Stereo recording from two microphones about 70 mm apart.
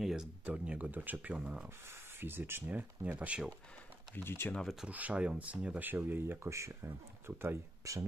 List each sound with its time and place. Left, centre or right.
0.0 s speech: centre
0.5 s speech: centre
1.9 s speech: right
4.1 s speech: left
4.8 s speech: right